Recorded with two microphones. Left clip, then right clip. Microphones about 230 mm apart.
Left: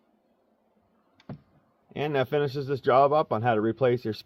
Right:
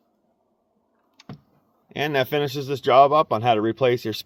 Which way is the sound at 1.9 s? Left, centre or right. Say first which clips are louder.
Right 4 dB; right.